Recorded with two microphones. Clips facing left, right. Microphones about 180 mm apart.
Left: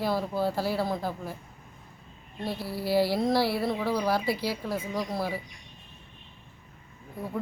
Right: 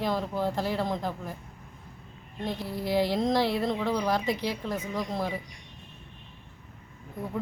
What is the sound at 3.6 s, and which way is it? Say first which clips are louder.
Speech: even; 5° left (ahead or behind).